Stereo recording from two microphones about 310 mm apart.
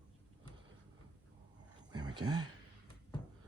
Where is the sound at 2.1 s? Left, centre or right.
Centre.